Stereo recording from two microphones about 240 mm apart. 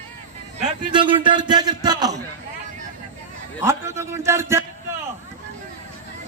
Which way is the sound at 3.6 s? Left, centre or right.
Centre.